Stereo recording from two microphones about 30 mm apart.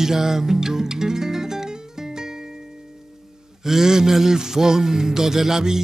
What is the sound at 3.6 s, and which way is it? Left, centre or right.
Music, centre.